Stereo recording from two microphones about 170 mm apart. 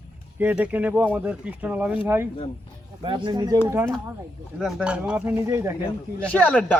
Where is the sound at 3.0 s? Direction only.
30° right (ahead or behind).